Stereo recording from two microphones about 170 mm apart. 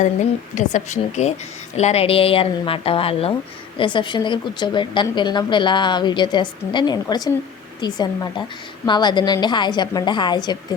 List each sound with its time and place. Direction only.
0.5 s a woman's voice: 45° left (ahead or behind); by 10.8 s 25° left (ahead or behind)